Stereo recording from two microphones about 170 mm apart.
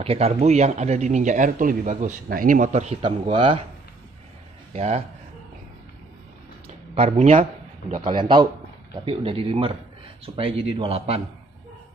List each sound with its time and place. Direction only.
0.0 s speech: 35° right (ahead or behind)
4.7 s speech: 40° right (ahead or behind)
7.0 s a man's voice: 35° right (ahead or behind)